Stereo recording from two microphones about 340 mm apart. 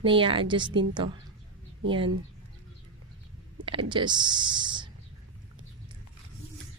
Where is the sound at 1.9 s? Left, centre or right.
Centre.